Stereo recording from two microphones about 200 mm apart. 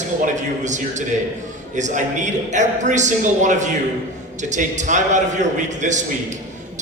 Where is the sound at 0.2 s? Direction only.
35° right (ahead or behind).